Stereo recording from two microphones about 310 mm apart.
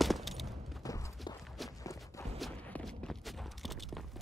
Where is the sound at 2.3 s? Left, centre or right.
Centre.